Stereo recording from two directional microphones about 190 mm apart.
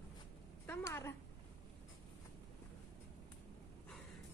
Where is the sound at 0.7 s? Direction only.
15° left (ahead or behind).